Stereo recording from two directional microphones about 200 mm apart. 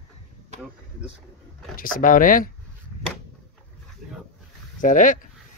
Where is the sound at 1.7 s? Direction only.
45° left (ahead or behind).